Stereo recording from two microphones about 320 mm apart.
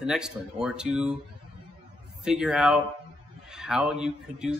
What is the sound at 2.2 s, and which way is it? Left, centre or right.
Speech, centre.